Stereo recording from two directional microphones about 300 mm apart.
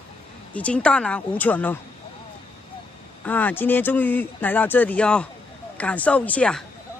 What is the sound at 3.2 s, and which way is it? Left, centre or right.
Speech, centre.